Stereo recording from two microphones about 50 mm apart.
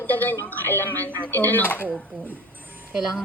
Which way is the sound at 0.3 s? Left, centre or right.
Left.